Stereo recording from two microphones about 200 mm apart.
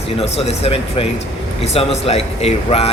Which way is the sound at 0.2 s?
30° left (ahead or behind).